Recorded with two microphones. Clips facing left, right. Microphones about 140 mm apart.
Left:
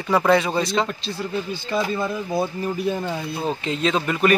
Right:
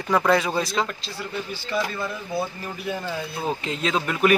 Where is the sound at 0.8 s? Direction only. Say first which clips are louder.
Left 5 dB; 25° left (ahead or behind).